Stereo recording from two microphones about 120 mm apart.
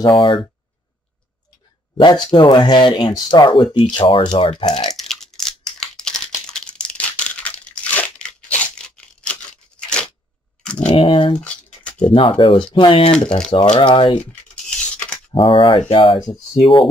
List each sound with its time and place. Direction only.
0.0 s speech: 40° left (ahead or behind)
2.0 s speech: 35° left (ahead or behind)
4.9 s crumpling: 5° left (ahead or behind)
10.6 s a sound: 10° left (ahead or behind)
10.9 s speech: 45° left (ahead or behind)
11.3 s a sound: 10° left (ahead or behind)
12.1 s speech: 45° left (ahead or behind)
13.8 s speech: 45° left (ahead or behind)
14.1 s a sound: 10° left (ahead or behind)
15.3 s speech: 45° left (ahead or behind)